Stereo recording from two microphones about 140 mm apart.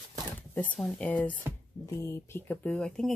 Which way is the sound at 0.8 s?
10° left (ahead or behind).